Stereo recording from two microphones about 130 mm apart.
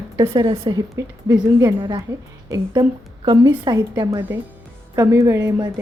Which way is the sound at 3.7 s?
30° right (ahead or behind).